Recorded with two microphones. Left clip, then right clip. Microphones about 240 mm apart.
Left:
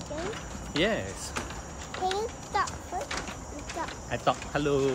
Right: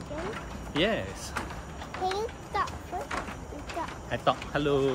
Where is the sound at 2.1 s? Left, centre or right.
Centre.